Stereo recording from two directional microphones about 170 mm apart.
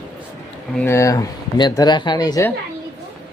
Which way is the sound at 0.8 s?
15° left (ahead or behind).